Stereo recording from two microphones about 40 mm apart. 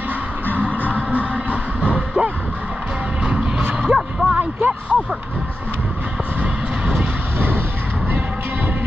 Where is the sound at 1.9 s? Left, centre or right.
Right.